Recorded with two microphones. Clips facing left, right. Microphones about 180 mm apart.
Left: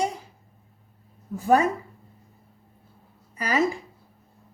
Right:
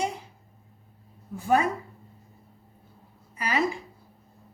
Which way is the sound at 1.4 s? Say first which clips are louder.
Left 3 dB; 35° left (ahead or behind).